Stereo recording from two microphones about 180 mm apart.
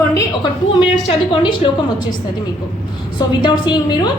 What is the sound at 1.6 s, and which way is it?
Speech, 30° left (ahead or behind).